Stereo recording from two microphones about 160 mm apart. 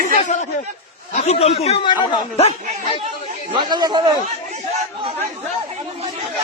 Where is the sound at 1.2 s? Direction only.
40° left (ahead or behind).